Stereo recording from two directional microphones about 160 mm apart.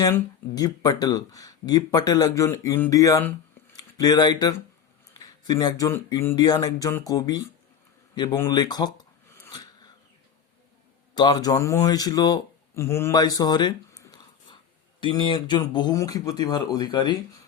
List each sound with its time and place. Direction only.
0.0 s speech: 20° left (ahead or behind)
9.5 s a sound: 25° left (ahead or behind)
11.1 s speech: 25° left (ahead or behind)